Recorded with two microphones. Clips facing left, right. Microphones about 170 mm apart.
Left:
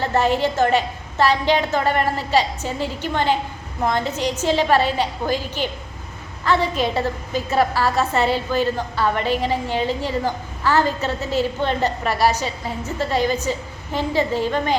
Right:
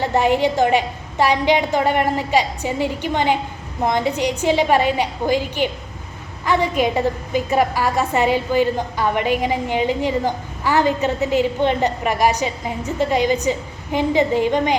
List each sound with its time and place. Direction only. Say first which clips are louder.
0.0 s a woman's voice: right 2 dB; 15° right (ahead or behind)